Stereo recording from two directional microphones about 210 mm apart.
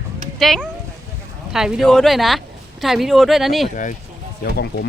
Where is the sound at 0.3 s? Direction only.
Centre (ahead or behind).